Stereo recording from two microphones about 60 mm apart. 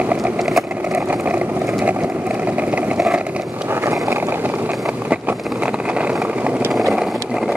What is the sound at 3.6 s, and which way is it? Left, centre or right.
Vehicle, right.